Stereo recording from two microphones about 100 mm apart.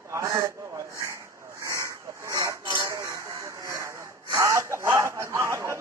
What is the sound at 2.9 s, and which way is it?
Vehicle, 30° right (ahead or behind).